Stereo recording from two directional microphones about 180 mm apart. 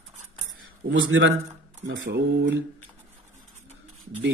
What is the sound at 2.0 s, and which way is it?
Speech, 75° right (ahead or behind).